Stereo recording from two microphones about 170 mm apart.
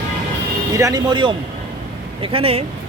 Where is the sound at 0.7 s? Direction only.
20° right (ahead or behind).